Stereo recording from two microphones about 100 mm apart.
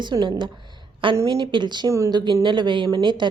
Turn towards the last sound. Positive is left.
turn(degrees=-50)  # may be behind; listen again after turning